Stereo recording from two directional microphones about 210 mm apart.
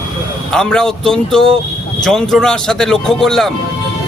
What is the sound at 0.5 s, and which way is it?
A man's voice, 5° left (ahead or behind).